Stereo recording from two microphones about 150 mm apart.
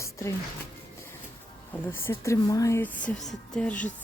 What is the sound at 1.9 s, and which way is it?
Speech, 15° left (ahead or behind).